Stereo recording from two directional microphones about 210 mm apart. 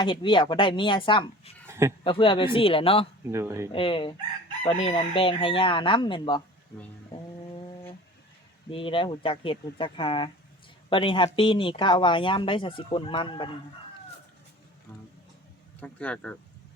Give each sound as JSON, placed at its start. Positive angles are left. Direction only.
{"t": 0.0, "sound": "speech", "side_deg": 25}
{"t": 1.6, "sound": "a sound", "side_deg": -10}
{"t": 2.0, "sound": "speech", "side_deg": 25}
{"t": 3.3, "sound": "speech", "side_deg": -10}
{"t": 3.7, "sound": "speech", "side_deg": 25}
{"t": 8.7, "sound": "speech", "side_deg": 25}
{"t": 15.8, "sound": "speech", "side_deg": 5}